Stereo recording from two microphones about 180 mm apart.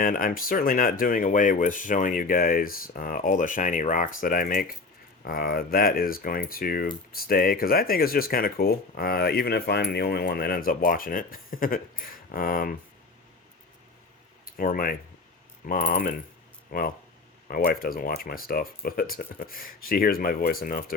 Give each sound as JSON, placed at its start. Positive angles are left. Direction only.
{"t": 0.0, "sound": "speech", "side_deg": 50}
{"t": 14.4, "sound": "speech", "side_deg": 50}